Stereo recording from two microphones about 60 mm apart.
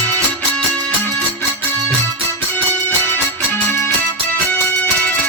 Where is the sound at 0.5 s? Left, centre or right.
Centre.